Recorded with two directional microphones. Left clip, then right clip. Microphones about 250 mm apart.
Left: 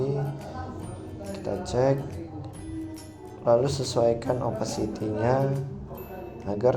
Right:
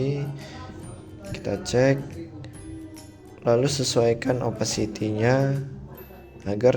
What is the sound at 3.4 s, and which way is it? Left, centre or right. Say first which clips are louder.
A man's voice: right 1 dB; right.